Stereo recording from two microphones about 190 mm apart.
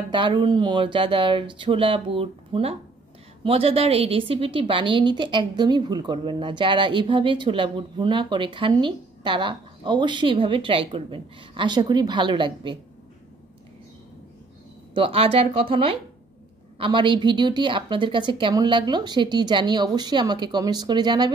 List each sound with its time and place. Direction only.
0.1 s a woman's voice: 25° right (ahead or behind)
15.0 s a woman's voice: 30° right (ahead or behind)